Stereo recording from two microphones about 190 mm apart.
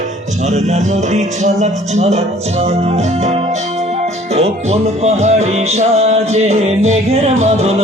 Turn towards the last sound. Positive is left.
turn(degrees=-35)  # may be behind; listen again after turning